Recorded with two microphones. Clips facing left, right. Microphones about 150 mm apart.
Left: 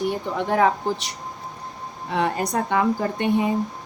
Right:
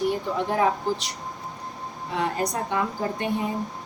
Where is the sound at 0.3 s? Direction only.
65° left (ahead or behind).